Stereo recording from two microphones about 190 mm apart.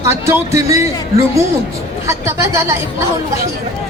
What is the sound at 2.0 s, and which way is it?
Speech, 15° right (ahead or behind).